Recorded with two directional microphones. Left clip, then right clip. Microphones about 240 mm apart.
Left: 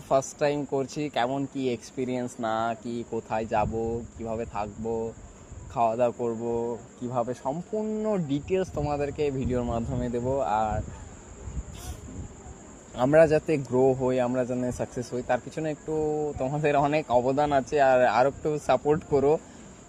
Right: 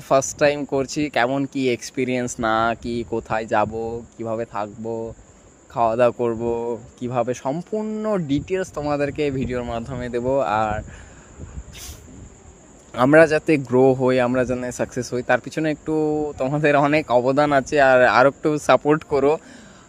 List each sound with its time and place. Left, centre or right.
0.1 s speech: right
12.9 s speech: right